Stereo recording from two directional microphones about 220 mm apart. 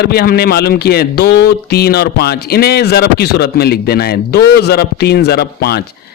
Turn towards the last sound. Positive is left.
turn(degrees=45)  # may be behind; listen again after turning